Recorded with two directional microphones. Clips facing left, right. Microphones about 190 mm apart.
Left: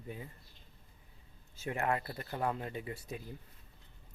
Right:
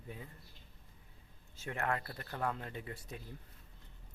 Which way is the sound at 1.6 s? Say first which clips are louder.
Left 3 dB; 15° left (ahead or behind).